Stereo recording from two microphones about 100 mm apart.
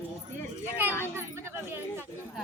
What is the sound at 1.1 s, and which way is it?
Chatter, 25° right (ahead or behind).